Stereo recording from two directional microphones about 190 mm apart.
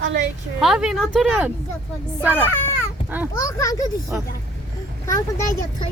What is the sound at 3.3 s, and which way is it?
Speech, 15° left (ahead or behind).